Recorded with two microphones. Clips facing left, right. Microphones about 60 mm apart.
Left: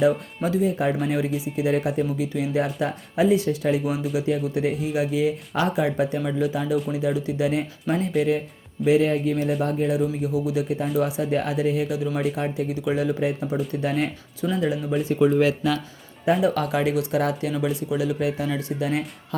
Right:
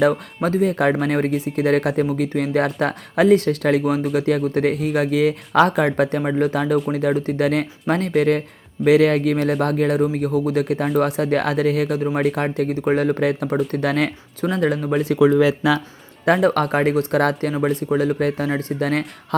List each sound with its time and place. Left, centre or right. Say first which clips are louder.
0.4 s speech: right 4 dB; right
10.0 s speech: right 5 dB; right
11.9 s speech: right 5 dB; right
12.2 s speech: right 5 dB; right
12.7 s speech: right 6 dB; right
14.5 s speech: right 4 dB; right
14.8 s speech: right 4 dB; right
16.2 s speech: right 4 dB; right
17.6 s speech: right 8 dB; right